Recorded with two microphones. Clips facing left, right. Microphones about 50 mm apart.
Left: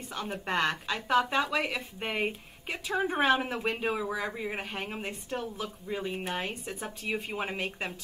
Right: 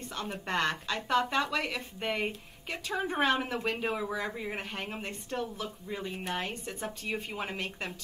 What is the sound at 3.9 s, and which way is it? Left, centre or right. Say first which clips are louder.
A woman's voice: left 1 dB; centre.